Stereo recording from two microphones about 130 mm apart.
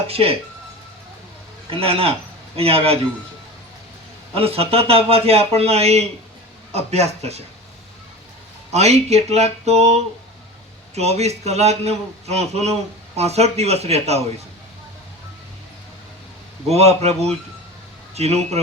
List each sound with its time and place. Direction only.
0.1 s a man's voice: 50° right (ahead or behind)
1.7 s a man's voice: 45° right (ahead or behind)
4.4 s a man's voice: 50° right (ahead or behind)
8.7 s a man's voice: 55° right (ahead or behind)
16.6 s a man's voice: 55° right (ahead or behind)